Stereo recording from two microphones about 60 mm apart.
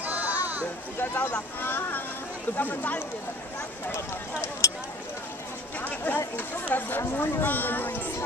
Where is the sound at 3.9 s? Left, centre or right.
Left.